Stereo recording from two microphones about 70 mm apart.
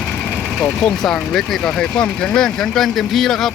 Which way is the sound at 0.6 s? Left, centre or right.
Centre.